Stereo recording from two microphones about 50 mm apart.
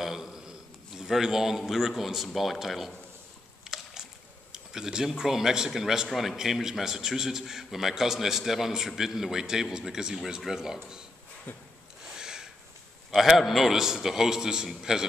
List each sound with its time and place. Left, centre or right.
0.0 s a man's voice: centre
3.6 s rowboat: centre
4.5 s a man's voice: centre
11.5 s a sound: left
12.0 s a sound: centre
13.1 s a man's voice: centre